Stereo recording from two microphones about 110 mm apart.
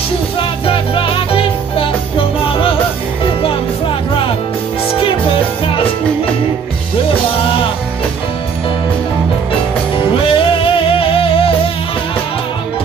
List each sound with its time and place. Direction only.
0.4 s music: 55° left (ahead or behind)
5.0 s music: 55° left (ahead or behind)
10.1 s music: 55° left (ahead or behind)